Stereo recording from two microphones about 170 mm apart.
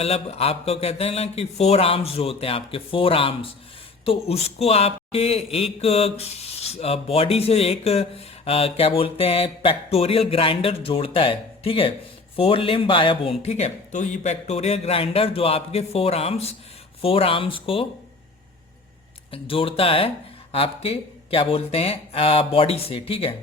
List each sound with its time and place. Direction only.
0.0 s speech: 35° left (ahead or behind)
19.3 s speech: 30° left (ahead or behind)